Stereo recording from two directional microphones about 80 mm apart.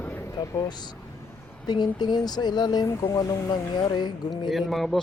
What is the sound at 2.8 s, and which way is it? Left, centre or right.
Speech, left.